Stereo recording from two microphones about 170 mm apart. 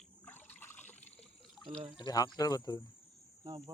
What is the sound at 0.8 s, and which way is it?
Trickle, 5° left (ahead or behind).